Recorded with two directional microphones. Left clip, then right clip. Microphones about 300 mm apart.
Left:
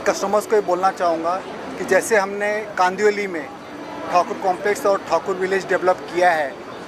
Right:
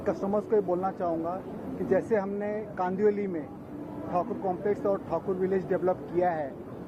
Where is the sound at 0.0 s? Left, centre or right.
Centre.